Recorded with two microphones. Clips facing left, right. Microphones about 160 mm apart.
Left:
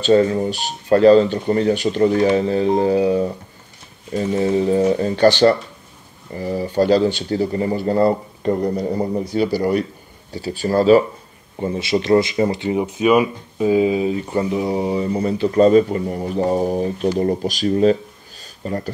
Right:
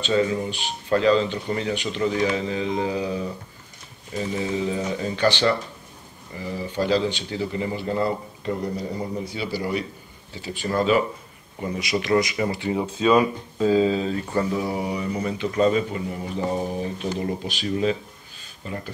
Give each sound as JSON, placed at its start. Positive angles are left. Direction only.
{"t": 0.0, "sound": "speech", "side_deg": 45}
{"t": 3.0, "sound": "speech", "side_deg": 55}
{"t": 4.1, "sound": "speech", "side_deg": 40}
{"t": 10.3, "sound": "speech", "side_deg": 35}